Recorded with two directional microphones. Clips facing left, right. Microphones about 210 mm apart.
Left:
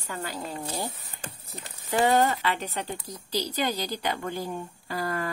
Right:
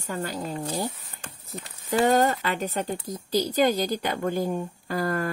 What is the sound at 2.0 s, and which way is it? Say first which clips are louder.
A woman's voice: right 1 dB; 45° right (ahead or behind).